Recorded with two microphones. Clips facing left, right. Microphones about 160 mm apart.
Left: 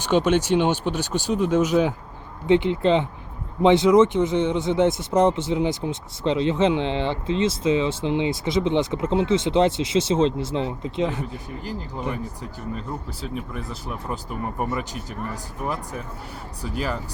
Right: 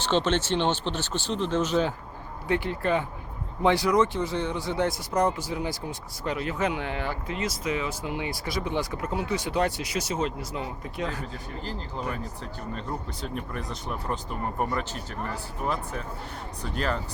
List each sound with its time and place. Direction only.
0.0 s speech: 10° left (ahead or behind)
13.2 s speech: centre (ahead or behind)